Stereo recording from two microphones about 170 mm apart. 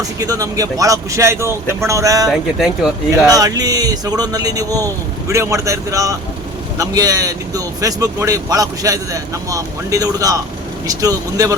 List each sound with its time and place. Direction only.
0.2 s speech: 20° right (ahead or behind)
2.3 s speech: centre (ahead or behind)
3.2 s speech: 20° right (ahead or behind)